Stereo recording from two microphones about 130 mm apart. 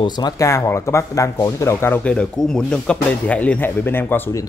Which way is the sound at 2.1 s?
5° left (ahead or behind).